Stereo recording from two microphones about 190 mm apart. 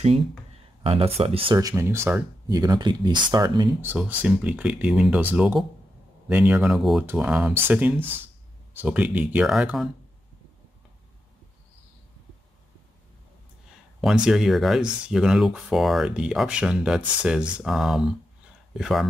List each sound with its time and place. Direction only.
0.8 s speech: 30° right (ahead or behind)
3.8 s speech: 10° right (ahead or behind)
14.0 s speech: 5° right (ahead or behind)